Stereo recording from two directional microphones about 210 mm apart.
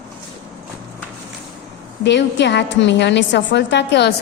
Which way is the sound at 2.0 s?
55° left (ahead or behind).